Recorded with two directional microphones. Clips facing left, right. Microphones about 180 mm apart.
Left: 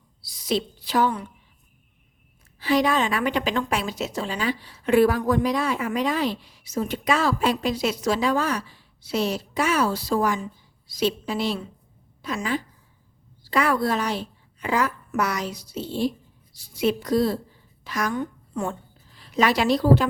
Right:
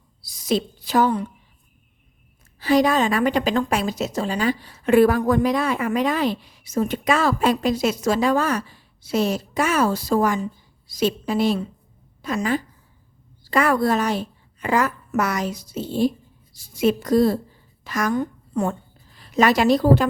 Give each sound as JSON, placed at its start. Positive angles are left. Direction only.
{"t": 0.2, "sound": "a woman's voice", "side_deg": -45}
{"t": 2.6, "sound": "a woman's voice", "side_deg": -45}